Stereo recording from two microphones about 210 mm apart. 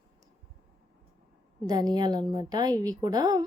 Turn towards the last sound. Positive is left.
turn(degrees=-20)  # may be behind; listen again after turning